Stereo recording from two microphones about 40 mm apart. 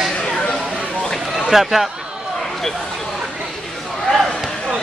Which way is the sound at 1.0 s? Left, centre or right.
Centre.